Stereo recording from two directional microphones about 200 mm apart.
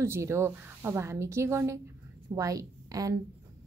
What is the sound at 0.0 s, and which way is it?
Speech, 15° right (ahead or behind).